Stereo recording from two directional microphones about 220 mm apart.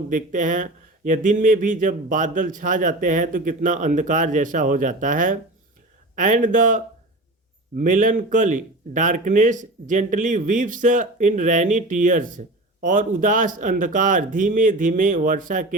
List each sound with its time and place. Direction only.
0.1 s speech: 35° right (ahead or behind)